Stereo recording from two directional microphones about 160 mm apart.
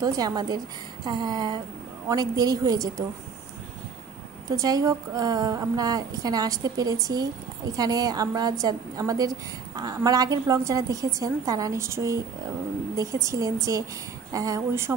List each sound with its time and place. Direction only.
0.0 s a woman's voice: 25° right (ahead or behind)
4.5 s a woman's voice: 20° right (ahead or behind)